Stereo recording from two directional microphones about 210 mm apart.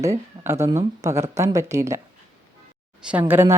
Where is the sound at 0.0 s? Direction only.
15° right (ahead or behind).